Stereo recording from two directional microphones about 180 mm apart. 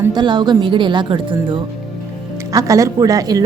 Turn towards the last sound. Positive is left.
turn(degrees=-20)  # may be behind; listen again after turning